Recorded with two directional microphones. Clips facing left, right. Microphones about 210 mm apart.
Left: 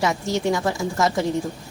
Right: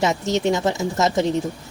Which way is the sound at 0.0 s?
20° right (ahead or behind).